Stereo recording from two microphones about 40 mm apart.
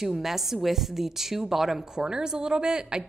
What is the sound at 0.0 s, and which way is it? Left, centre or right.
Speech, centre.